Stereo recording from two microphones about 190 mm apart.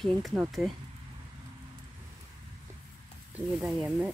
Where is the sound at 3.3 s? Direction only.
5° right (ahead or behind).